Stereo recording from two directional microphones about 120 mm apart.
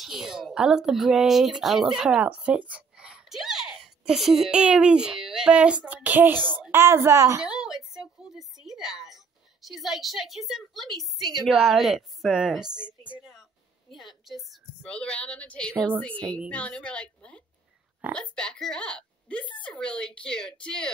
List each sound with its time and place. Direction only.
0.0 s speech: centre (ahead or behind); by 7.4 s 25° right (ahead or behind)
7.4 s a sound: 5° right (ahead or behind)
9.7 s a woman's voice: centre (ahead or behind)
13.0 s music: 10° right (ahead or behind)
14.2 s a woman's voice: centre (ahead or behind)
14.8 s a woman's voice: 10° left (ahead or behind)